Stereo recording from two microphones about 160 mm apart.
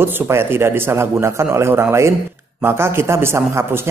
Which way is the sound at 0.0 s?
15° right (ahead or behind).